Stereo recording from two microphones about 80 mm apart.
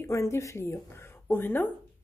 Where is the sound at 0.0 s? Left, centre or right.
Left.